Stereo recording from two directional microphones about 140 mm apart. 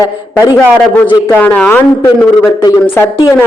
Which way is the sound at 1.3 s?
10° left (ahead or behind).